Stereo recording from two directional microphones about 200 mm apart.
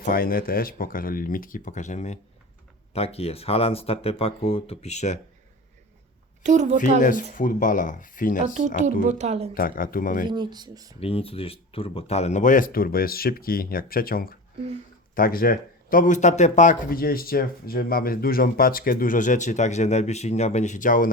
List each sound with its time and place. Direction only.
0.0 s speech: 45° left (ahead or behind)
6.4 s speech: 35° right (ahead or behind)
6.7 s speech: 40° left (ahead or behind)
8.5 s speech: 40° right (ahead or behind)
9.6 s speech: 45° left (ahead or behind)
10.2 s speech: 20° right (ahead or behind)
11.0 s speech: 30° left (ahead or behind)